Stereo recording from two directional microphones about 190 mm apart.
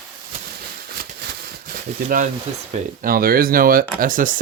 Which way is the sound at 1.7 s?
45° right (ahead or behind).